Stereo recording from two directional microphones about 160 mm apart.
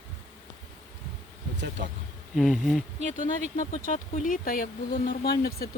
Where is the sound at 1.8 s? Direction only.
90° right.